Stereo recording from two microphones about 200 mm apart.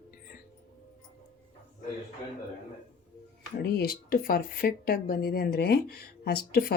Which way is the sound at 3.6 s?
50° left (ahead or behind).